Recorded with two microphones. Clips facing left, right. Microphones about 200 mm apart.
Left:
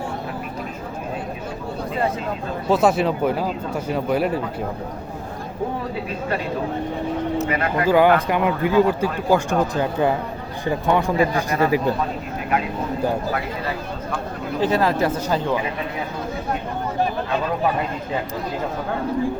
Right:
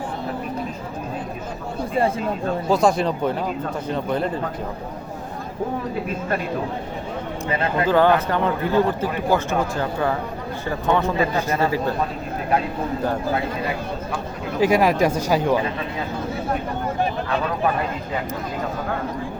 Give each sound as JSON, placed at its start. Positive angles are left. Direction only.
{"t": 2.6, "sound": "speech", "side_deg": 5}
{"t": 6.1, "sound": "speech", "side_deg": -50}
{"t": 7.4, "sound": "speech", "side_deg": -25}
{"t": 7.9, "sound": "a man's voice", "side_deg": 10}
{"t": 14.6, "sound": "speech", "side_deg": -15}